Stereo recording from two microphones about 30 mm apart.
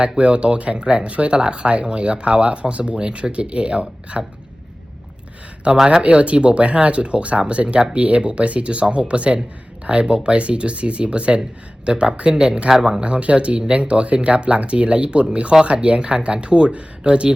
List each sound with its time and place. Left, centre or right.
0.0 s speech: right
5.7 s speech: right
6.0 s speech: right
8.2 s speech: right
12.3 s speech: right
13.0 s speech: right